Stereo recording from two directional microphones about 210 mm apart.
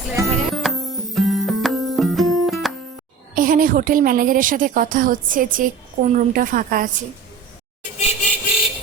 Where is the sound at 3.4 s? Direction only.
40° right (ahead or behind).